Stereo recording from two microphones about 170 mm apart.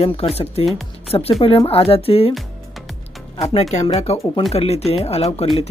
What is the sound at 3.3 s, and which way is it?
Speech, 40° left (ahead or behind).